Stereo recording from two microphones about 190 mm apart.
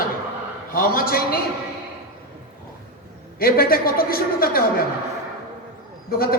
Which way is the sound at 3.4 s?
50° left (ahead or behind).